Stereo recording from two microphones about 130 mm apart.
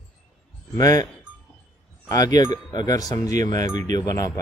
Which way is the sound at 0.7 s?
25° left (ahead or behind).